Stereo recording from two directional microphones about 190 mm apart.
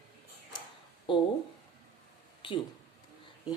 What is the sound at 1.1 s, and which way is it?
Speech, 25° left (ahead or behind).